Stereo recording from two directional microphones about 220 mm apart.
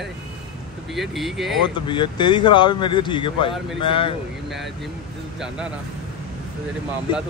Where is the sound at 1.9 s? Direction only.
20° left (ahead or behind).